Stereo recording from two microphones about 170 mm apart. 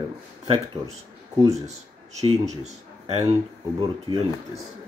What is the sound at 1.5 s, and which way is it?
Speech, 40° right (ahead or behind).